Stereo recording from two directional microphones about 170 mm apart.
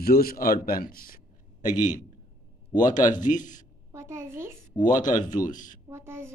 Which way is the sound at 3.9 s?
15° right (ahead or behind).